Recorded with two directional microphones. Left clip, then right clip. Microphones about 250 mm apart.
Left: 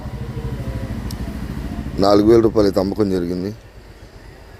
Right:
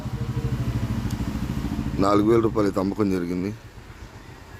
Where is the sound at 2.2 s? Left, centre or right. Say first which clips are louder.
Left 7 dB; centre.